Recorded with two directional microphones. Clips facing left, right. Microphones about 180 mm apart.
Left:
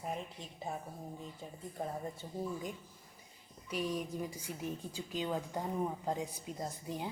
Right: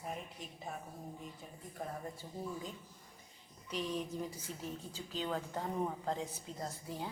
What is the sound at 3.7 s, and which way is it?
A woman's voice, 10° left (ahead or behind).